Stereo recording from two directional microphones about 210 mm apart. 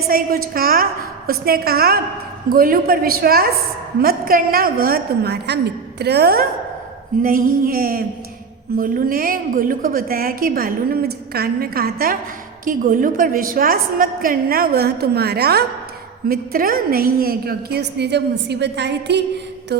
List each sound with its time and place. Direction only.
0.1 s a woman's voice: 45° right (ahead or behind)